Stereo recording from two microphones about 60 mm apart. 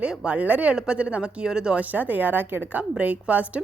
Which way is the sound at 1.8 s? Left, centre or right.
Right.